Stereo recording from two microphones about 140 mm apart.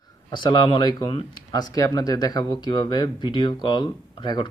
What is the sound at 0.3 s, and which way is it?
Speech, 35° left (ahead or behind).